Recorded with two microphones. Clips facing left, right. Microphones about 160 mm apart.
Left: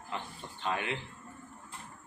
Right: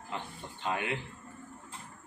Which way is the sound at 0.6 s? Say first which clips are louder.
Even; 15° right (ahead or behind).